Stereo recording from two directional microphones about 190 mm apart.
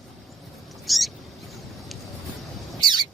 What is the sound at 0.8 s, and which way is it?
Owl, centre (ahead or behind).